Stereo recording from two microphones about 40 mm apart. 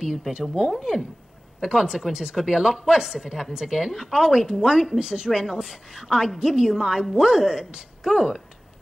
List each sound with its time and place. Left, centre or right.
0.3 s speech: centre
0.7 s a woman's voice: centre
1.6 s a woman's voice: centre